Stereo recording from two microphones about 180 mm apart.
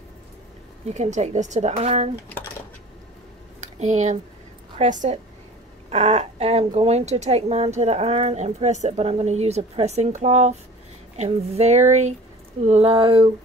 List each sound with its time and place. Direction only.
0.8 s speech: 40° right (ahead or behind)
3.8 s speech: 40° right (ahead or behind)
12.6 s a sound: 35° right (ahead or behind)